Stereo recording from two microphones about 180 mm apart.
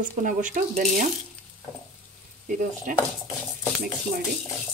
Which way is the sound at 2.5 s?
45° right (ahead or behind).